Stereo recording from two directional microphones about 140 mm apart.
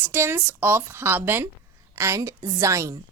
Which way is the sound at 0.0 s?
15° right (ahead or behind).